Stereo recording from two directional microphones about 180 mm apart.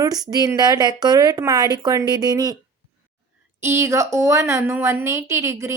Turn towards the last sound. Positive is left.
turn(degrees=-15)  # may be behind; listen again after turning